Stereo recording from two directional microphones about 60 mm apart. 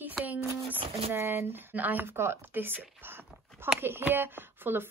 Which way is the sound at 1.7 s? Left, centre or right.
Right.